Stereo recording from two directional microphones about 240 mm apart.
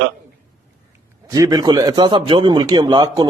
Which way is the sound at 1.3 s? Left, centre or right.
Centre.